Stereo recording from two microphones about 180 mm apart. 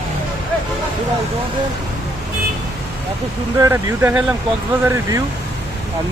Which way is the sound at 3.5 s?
15° right (ahead or behind).